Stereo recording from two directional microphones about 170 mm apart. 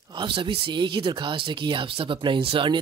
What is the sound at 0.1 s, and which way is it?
Speech, 30° right (ahead or behind).